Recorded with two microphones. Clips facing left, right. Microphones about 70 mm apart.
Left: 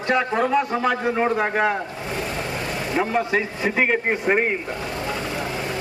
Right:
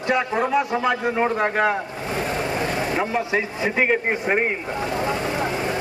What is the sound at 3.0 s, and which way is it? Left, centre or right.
A man's voice, centre.